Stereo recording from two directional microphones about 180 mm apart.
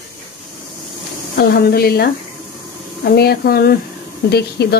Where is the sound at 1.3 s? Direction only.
60° left (ahead or behind).